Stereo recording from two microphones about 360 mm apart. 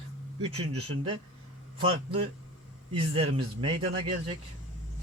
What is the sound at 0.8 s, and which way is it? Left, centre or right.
A man's voice, centre.